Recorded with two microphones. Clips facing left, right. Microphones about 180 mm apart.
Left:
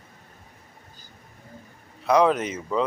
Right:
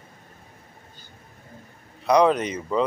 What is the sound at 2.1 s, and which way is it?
Speech, 5° left (ahead or behind).